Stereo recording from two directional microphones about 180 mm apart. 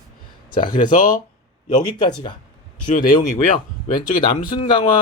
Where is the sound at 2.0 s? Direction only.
25° left (ahead or behind).